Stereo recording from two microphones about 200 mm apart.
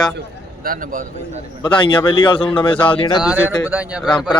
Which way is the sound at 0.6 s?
45° right (ahead or behind).